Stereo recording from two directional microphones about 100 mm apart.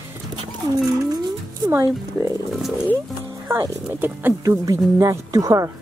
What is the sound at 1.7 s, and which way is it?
Speech, 25° right (ahead or behind).